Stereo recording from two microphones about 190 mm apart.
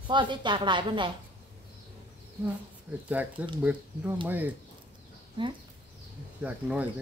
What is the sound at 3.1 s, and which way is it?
Speech, 10° right (ahead or behind).